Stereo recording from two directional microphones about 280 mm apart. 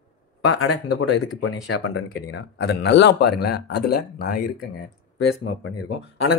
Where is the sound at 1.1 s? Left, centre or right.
Left.